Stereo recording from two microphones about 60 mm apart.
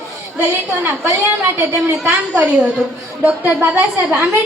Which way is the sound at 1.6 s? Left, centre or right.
Right.